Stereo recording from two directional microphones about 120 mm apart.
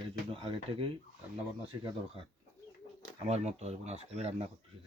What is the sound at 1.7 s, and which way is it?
Speech, 35° right (ahead or behind).